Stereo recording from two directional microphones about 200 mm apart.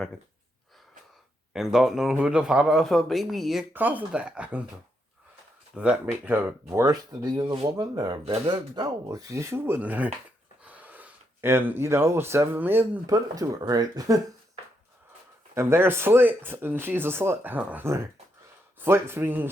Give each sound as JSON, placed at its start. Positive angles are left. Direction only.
{"t": 1.5, "sound": "a man's voice", "side_deg": 0}
{"t": 5.7, "sound": "speech", "side_deg": -5}
{"t": 15.5, "sound": "speech", "side_deg": -10}